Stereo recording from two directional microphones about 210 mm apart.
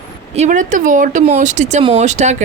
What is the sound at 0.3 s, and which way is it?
Speech, 35° right (ahead or behind).